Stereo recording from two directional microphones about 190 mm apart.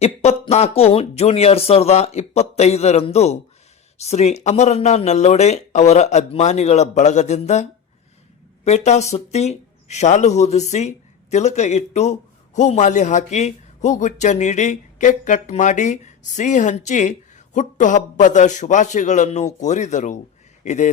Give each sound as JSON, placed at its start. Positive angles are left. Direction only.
{"t": 0.0, "sound": "a man's voice", "side_deg": 35}